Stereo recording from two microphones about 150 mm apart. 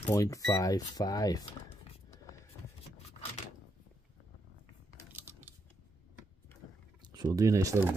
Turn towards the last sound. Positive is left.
turn(degrees=-20)  # may be behind; listen again after turning